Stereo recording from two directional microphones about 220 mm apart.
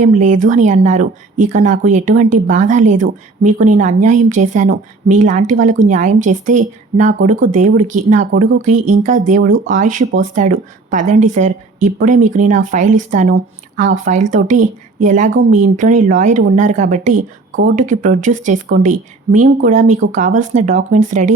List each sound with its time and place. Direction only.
0.0 s speech: 35° right (ahead or behind)